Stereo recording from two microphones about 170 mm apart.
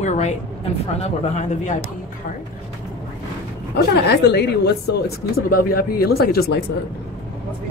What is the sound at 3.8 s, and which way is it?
Speech, 75° left (ahead or behind).